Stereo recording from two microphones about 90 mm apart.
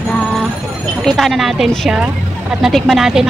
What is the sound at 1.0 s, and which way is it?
Speech, centre (ahead or behind).